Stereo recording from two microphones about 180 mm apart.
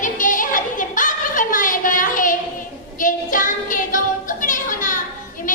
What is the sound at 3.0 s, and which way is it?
Child singing, 45° left (ahead or behind).